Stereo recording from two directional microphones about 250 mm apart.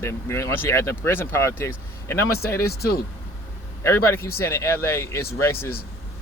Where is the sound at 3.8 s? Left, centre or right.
Centre.